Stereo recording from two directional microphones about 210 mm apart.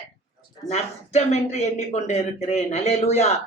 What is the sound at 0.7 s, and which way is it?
Speech, 30° left (ahead or behind).